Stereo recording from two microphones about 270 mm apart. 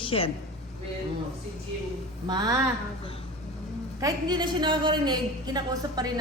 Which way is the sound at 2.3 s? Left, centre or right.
Centre.